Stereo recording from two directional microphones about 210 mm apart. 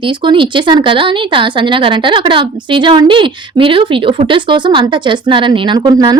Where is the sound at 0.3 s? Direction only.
20° right (ahead or behind).